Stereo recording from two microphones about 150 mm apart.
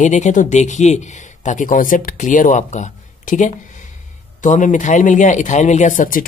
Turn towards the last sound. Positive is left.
turn(degrees=60)  # may be behind; listen again after turning